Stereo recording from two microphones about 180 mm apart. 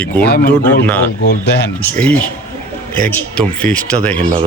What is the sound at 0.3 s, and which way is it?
Speech, 60° left (ahead or behind).